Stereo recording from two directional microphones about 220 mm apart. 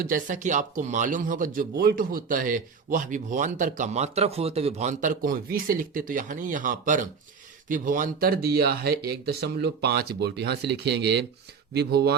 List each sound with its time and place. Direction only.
0.0 s speech: 35° right (ahead or behind)